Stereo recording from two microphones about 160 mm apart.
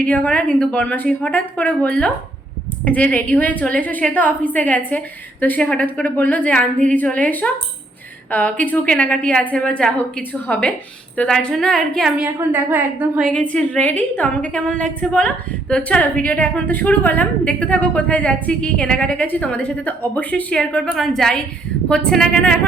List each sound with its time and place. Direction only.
0.0 s a woman's voice: 10° left (ahead or behind); by 13.3 s 5° right (ahead or behind)
13.3 s a woman's voice: 5° left (ahead or behind)